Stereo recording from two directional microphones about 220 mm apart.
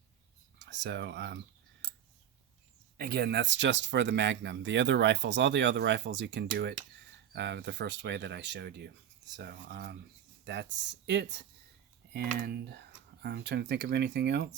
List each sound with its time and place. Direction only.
0.6 s speech: 50° right (ahead or behind)
3.0 s speech: 45° right (ahead or behind)